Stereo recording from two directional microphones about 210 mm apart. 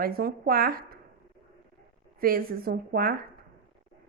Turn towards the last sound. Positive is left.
turn(degrees=-45)  # may be behind; listen again after turning